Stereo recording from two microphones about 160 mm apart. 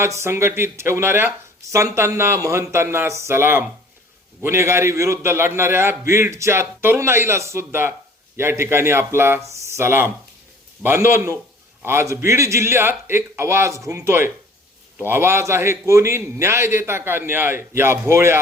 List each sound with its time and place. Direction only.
0.0 s a man's voice: 15° right (ahead or behind)